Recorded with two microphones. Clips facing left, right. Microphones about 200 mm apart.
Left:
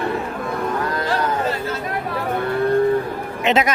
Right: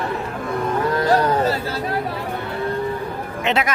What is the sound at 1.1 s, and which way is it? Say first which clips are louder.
Chatter: right 5 dB; 35° right (ahead or behind).